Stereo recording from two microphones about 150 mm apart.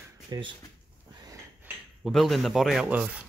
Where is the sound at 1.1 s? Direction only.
25° right (ahead or behind).